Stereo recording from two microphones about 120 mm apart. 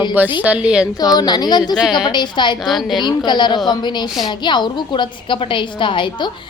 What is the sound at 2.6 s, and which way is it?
Speech, centre (ahead or behind).